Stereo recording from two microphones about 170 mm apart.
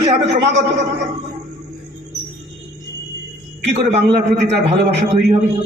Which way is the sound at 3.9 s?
40° right (ahead or behind).